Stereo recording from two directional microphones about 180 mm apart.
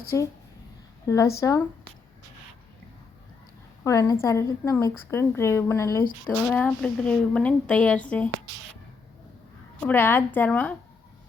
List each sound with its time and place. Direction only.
0.1 s a woman's voice: 15° left (ahead or behind)
3.8 s a woman's voice: 15° left (ahead or behind)
9.8 s a woman's voice: 10° left (ahead or behind)